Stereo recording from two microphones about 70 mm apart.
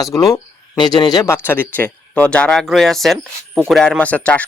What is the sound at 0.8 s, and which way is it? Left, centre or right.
Speech, left.